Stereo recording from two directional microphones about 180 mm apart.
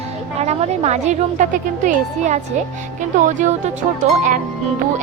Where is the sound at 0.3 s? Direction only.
35° right (ahead or behind).